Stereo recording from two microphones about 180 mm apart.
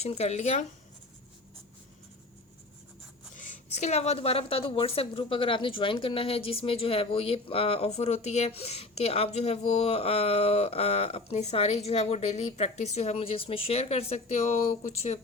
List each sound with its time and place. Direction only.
0.0 s a woman's voice: 35° left (ahead or behind)
3.3 s a woman's voice: 45° left (ahead or behind)